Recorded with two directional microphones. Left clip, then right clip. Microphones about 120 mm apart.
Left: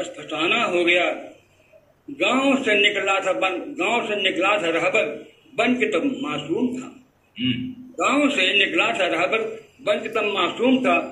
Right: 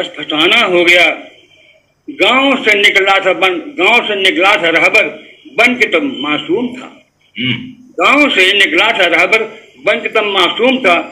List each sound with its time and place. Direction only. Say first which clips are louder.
0.0 s a man's voice: right 12 dB; 35° right (ahead or behind)
2.1 s a man's voice: right 10 dB; 35° right (ahead or behind)
8.0 s a man's voice: right 11 dB; 30° right (ahead or behind)